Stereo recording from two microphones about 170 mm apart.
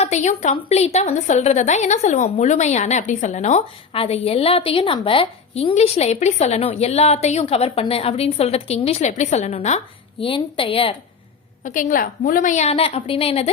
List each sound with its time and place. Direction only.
0.0 s a woman's voice: 45° left (ahead or behind)
11.6 s a woman's voice: 50° left (ahead or behind)